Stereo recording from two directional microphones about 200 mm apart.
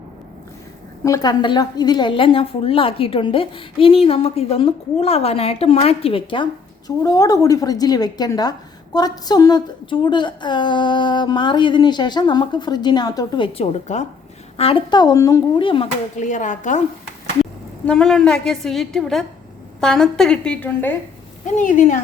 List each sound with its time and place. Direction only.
1.0 s a woman's voice: 20° left (ahead or behind)
16.2 s speech: 40° left (ahead or behind)
17.4 s a woman's voice: 5° left (ahead or behind)
21.6 s speech: 40° left (ahead or behind)